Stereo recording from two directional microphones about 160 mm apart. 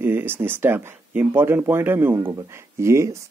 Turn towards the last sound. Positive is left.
turn(degrees=-20)  # may be behind; listen again after turning